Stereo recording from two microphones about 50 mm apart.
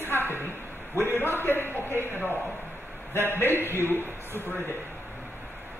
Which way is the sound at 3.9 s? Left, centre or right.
Right.